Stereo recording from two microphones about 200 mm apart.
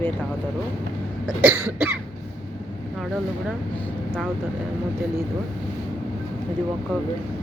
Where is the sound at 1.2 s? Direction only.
10° right (ahead or behind).